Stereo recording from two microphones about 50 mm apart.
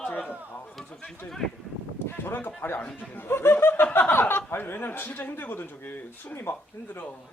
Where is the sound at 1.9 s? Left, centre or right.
Left.